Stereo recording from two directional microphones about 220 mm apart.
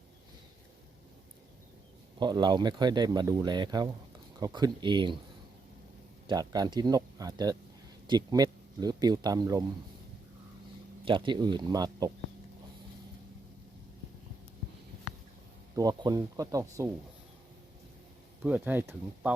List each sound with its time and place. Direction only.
2.1 s speech: 20° right (ahead or behind)
6.2 s speech: 15° right (ahead or behind)
11.0 s speech: 20° right (ahead or behind)
15.7 s speech: 15° right (ahead or behind)
18.4 s speech: 10° right (ahead or behind)